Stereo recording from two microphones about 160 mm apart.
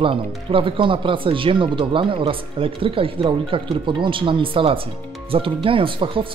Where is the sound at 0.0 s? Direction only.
35° right (ahead or behind).